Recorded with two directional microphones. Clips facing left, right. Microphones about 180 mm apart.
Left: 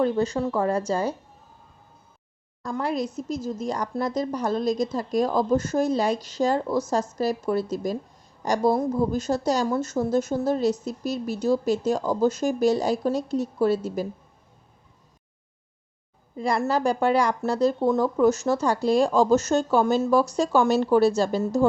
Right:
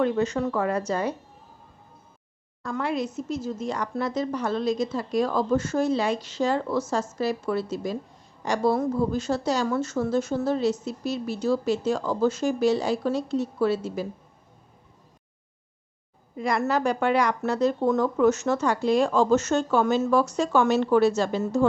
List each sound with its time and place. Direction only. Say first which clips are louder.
0.0 s speech: left 1 dB; 30° left (ahead or behind)
2.6 s speech: left 1 dB; 35° left (ahead or behind)
5.3 s speech: left 2 dB; 15° left (ahead or behind)
5.5 s speech: left 1 dB; 40° left (ahead or behind)
6.7 s speech: left 1 dB; 15° left (ahead or behind)
7.2 s speech: left 2 dB; 40° left (ahead or behind)
8.5 s speech: left 1 dB; 15° left (ahead or behind)
9.1 s a woman's voice: left 2 dB; 40° left (ahead or behind)
16.4 s speech: left 1 dB; 30° left (ahead or behind)
17.7 s speech: left 1 dB; 10° left (ahead or behind)
18.2 s speech: left 1 dB; 35° left (ahead or behind)